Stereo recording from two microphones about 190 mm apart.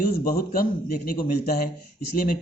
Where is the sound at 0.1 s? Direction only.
50° left (ahead or behind).